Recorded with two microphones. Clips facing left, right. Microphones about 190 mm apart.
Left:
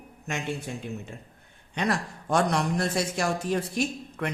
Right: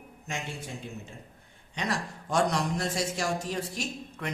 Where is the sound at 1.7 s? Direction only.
55° left (ahead or behind).